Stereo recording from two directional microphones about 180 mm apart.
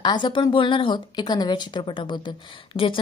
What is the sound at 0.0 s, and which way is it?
Speech, 25° left (ahead or behind).